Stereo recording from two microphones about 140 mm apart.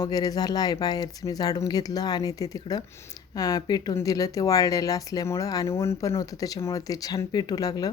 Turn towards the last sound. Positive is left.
turn(degrees=25)  # may be behind; listen again after turning